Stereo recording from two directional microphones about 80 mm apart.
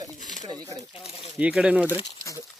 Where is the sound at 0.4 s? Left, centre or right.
Right.